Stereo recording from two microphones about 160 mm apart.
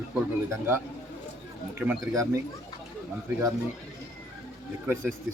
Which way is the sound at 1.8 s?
5° right (ahead or behind).